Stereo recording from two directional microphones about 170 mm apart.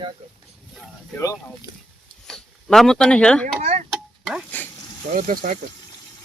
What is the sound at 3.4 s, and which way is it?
Speech, 45° right (ahead or behind).